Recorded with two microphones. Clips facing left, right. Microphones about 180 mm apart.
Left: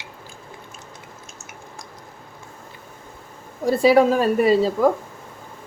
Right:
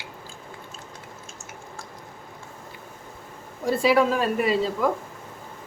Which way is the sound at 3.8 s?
40° left (ahead or behind).